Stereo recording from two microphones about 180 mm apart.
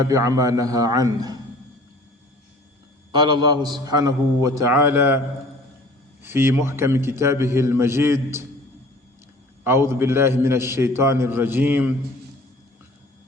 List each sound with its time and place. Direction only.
0.1 s a man's voice: 15° right (ahead or behind)
3.1 s a man's voice: 25° right (ahead or behind)
6.2 s a man's voice: 15° right (ahead or behind)
9.6 s a man's voice: 15° right (ahead or behind)